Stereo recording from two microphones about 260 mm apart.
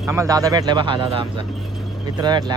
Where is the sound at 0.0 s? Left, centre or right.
Centre.